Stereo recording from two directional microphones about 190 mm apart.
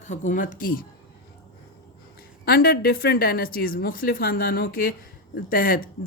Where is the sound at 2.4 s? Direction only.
55° left (ahead or behind).